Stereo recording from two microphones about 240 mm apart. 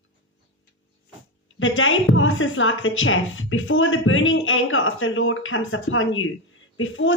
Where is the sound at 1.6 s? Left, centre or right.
Left.